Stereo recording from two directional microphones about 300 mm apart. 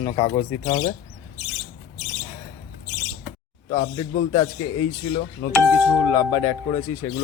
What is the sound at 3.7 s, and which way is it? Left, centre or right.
Speech, left.